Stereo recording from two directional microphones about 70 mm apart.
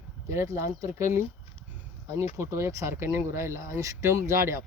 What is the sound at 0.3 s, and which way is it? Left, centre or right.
Speech, right.